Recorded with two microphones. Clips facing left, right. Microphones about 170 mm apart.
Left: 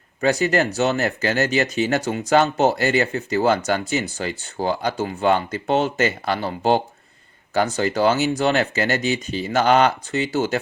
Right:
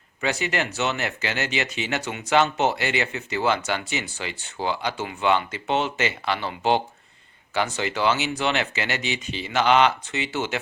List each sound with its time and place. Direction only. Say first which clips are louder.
0.2 s speech: left 7 dB; 40° left (ahead or behind)